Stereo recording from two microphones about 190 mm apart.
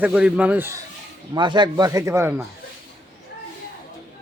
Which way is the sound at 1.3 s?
25° right (ahead or behind).